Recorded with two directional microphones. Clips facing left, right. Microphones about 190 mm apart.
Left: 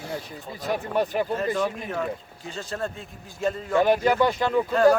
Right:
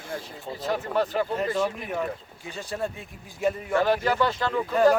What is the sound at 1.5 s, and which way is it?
Speech, 15° right (ahead or behind).